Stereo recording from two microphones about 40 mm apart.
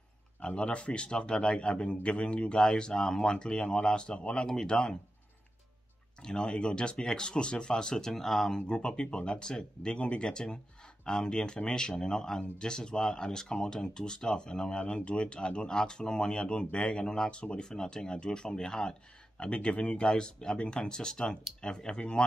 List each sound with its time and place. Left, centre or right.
0.4 s speech: left
6.2 s speech: left